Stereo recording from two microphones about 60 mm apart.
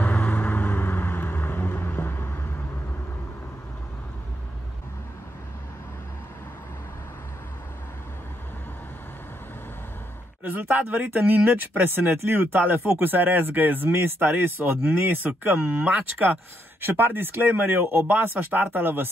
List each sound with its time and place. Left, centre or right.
0.0 s vehicle: left
10.4 s speech: right